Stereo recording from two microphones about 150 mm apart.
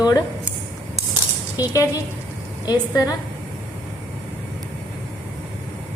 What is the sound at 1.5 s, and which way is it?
Speech, 20° left (ahead or behind).